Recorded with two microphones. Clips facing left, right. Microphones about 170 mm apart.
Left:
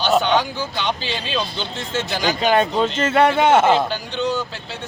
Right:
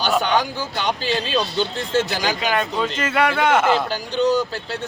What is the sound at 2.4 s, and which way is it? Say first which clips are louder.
Speech: left 8 dB; 30° left (ahead or behind).